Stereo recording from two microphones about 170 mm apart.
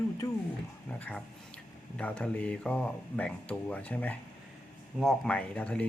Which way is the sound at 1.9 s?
5° left (ahead or behind).